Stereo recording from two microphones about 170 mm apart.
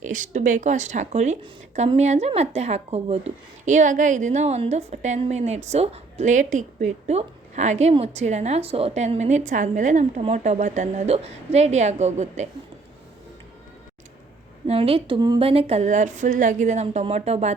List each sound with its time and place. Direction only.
0.1 s speech: 50° right (ahead or behind)
14.7 s speech: 35° right (ahead or behind)